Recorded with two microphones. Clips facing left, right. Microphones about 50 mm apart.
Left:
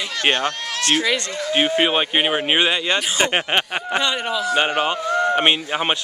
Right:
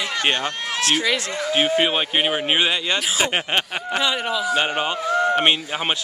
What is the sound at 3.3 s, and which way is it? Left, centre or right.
Speech, centre.